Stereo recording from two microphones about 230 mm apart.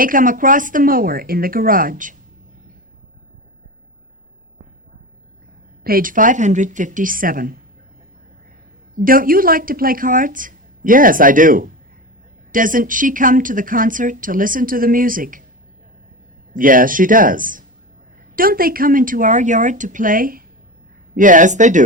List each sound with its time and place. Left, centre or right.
0.0 s speech: right
5.8 s speech: right
9.0 s speech: right
16.6 s speech: right